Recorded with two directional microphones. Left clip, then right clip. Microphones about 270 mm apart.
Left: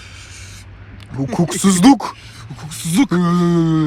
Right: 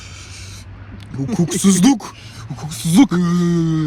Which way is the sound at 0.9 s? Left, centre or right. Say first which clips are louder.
Left 2 dB; centre.